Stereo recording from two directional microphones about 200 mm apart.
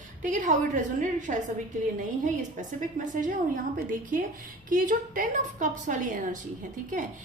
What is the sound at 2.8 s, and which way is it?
Speech, 40° right (ahead or behind).